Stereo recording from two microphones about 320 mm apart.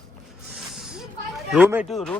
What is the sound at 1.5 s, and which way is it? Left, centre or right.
Speech, centre.